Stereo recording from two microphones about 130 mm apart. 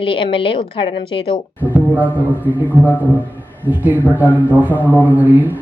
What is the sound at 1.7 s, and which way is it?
Music, 10° right (ahead or behind).